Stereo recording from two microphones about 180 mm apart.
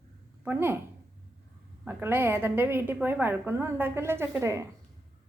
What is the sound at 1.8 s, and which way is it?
A woman's voice, 10° right (ahead or behind).